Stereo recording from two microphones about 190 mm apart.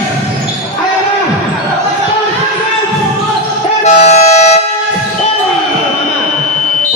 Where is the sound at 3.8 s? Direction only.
35° left (ahead or behind).